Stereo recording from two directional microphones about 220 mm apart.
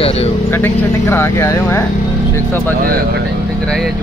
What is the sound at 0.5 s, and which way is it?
Speech, 10° left (ahead or behind).